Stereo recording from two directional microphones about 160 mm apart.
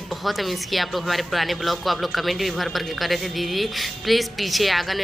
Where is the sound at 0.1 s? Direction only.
Centre (ahead or behind).